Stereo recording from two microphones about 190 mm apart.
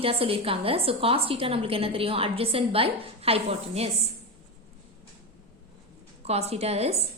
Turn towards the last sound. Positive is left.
turn(degrees=-35)  # may be behind; listen again after turning